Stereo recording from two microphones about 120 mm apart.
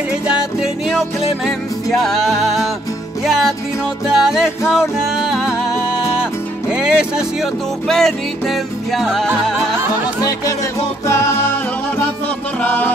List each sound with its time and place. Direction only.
0.3 s music: 5° right (ahead or behind)
4.1 s music: 5° right (ahead or behind)
6.8 s music: 5° right (ahead or behind)
11.1 s music: 25° left (ahead or behind)
12.6 s music: 15° left (ahead or behind)